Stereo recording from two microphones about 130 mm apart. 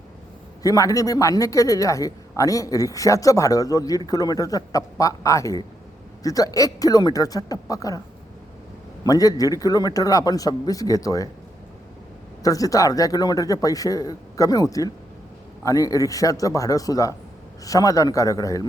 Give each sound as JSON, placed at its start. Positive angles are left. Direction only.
{"t": 0.6, "sound": "speech", "side_deg": 25}
{"t": 9.0, "sound": "speech", "side_deg": 30}
{"t": 12.4, "sound": "speech", "side_deg": 25}